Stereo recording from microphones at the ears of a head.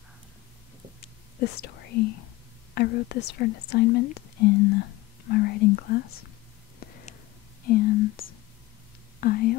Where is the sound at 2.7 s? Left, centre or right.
Left.